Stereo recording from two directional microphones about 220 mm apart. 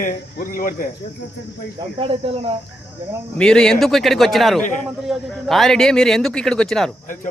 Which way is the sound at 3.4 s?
5° left (ahead or behind).